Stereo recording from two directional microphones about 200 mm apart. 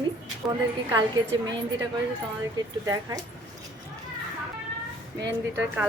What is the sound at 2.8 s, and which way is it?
Speech, 15° right (ahead or behind).